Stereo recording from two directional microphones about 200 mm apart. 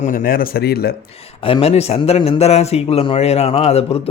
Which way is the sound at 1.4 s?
30° left (ahead or behind).